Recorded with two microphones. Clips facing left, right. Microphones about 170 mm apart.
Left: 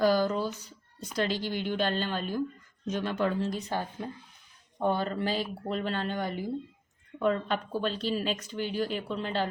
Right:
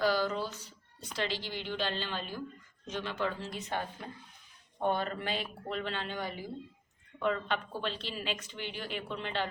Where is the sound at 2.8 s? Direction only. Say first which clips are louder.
Left 6 dB; 45° left (ahead or behind).